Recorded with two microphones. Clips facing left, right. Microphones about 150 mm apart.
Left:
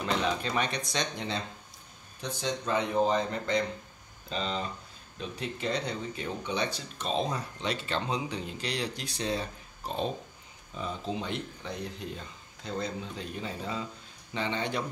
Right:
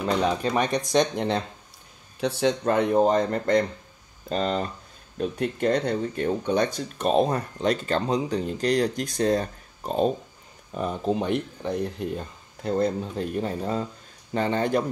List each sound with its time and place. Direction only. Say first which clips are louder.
0.0 s speech: right 6 dB; 45° right (ahead or behind)
2.1 s speech: right 10 dB; 70° right (ahead or behind); by 10.1 s 45° right (ahead or behind)
10.7 s speech: right 9 dB; 55° right (ahead or behind)